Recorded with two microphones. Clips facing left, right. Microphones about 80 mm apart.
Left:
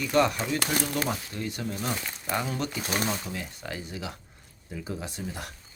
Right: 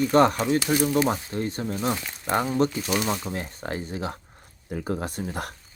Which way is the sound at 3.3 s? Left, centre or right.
Right.